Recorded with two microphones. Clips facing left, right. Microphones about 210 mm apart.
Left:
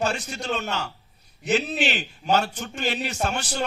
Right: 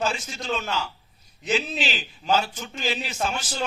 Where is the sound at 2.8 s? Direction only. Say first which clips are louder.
Left 2 dB; 65° left (ahead or behind).